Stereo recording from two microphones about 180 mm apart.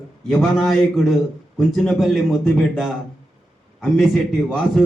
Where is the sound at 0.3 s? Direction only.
5° left (ahead or behind).